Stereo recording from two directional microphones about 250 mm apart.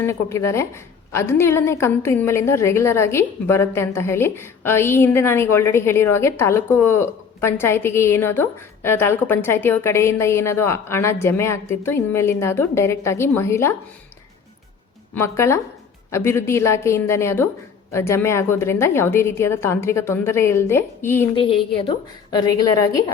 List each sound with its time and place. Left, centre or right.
0.0 s a woman's voice: centre
15.1 s a woman's voice: centre
21.3 s a woman's voice: left